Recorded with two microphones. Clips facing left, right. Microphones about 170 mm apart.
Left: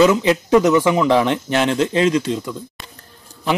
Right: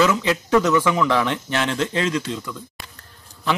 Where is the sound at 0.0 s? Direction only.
20° left (ahead or behind).